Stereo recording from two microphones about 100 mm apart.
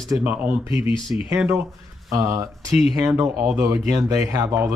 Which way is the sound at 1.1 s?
25° right (ahead or behind).